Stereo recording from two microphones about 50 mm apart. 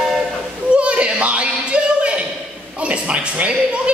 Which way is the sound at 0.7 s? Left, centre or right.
Right.